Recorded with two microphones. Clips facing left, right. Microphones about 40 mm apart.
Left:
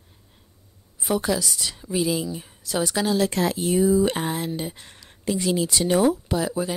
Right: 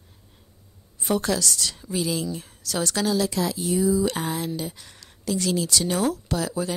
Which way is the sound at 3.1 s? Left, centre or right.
Left.